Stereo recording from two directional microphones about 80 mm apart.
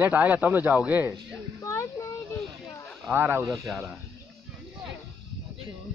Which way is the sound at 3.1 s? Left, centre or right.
Right.